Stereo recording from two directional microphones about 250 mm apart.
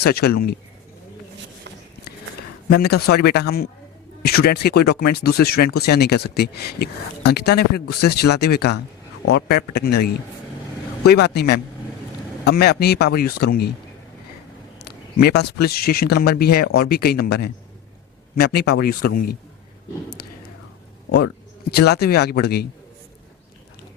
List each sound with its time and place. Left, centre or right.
0.0 s speech: left
2.6 s speech: left
14.8 s speech: left
21.1 s speech: left